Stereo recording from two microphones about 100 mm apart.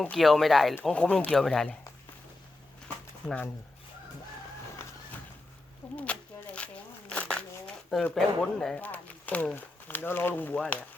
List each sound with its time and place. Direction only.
0.0 s speech: 5° left (ahead or behind)
3.2 s speech: 15° left (ahead or behind)
6.0 s a sound: 10° left (ahead or behind)
8.1 s speech: 5° left (ahead or behind)
8.8 s speech: 15° left (ahead or behind)